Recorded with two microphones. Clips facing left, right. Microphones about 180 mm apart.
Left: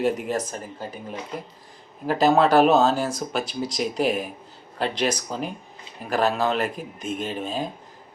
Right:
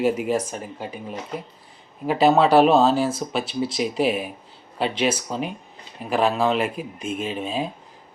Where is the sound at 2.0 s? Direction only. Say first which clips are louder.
Right 1 dB; 5° right (ahead or behind).